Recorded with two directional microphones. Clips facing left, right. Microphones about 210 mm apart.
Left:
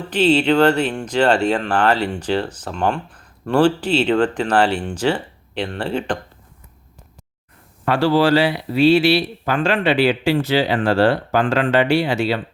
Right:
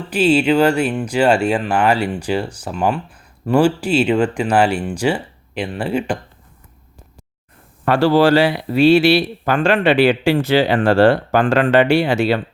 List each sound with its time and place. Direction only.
0.1 s speech: 10° right (ahead or behind)
7.9 s speech: 45° right (ahead or behind)